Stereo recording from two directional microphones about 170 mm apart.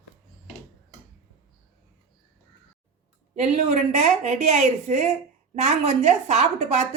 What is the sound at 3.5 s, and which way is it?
A woman's voice, 40° right (ahead or behind).